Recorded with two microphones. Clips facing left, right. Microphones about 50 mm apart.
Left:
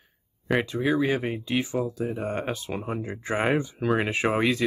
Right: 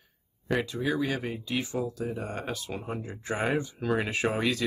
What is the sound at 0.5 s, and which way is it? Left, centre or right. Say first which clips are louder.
Speech: left 5 dB; left.